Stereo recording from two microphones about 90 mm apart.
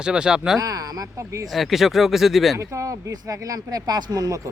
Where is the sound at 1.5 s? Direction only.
Centre (ahead or behind).